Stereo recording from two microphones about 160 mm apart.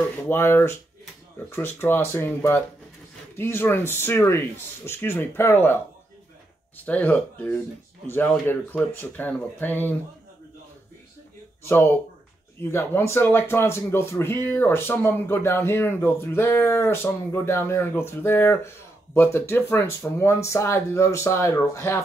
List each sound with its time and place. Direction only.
0.3 s speech: 15° left (ahead or behind)
6.9 s speech: 10° left (ahead or behind)
11.6 s speech: 15° left (ahead or behind)